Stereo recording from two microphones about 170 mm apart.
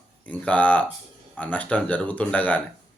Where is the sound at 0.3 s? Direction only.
10° left (ahead or behind).